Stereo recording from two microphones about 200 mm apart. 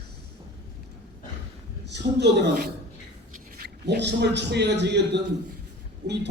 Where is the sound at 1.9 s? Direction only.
60° right (ahead or behind).